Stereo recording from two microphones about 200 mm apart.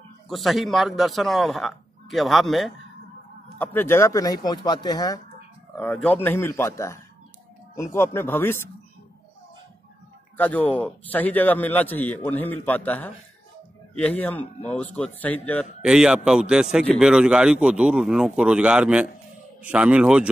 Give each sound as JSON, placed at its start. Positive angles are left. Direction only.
{"t": 0.3, "sound": "a man's voice", "side_deg": 0}
{"t": 5.8, "sound": "a man's voice", "side_deg": 5}
{"t": 10.3, "sound": "a man's voice", "side_deg": 10}
{"t": 15.8, "sound": "a man's voice", "side_deg": -5}